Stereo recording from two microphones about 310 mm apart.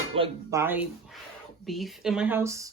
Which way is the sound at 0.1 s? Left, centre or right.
Centre.